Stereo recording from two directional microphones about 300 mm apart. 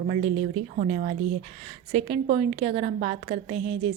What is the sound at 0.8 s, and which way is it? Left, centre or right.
A woman's voice, right.